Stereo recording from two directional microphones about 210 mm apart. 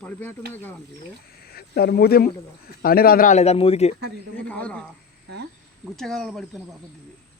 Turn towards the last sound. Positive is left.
turn(degrees=0)  # may be behind; listen again after turning